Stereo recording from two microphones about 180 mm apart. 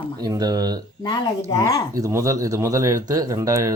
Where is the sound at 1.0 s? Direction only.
20° left (ahead or behind).